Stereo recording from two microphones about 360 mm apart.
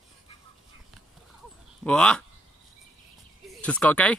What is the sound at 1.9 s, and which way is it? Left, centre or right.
Speech, centre.